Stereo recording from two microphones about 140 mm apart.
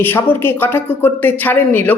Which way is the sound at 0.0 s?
15° left (ahead or behind).